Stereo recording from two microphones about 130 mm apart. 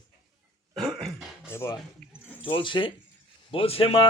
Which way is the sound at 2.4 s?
40° left (ahead or behind).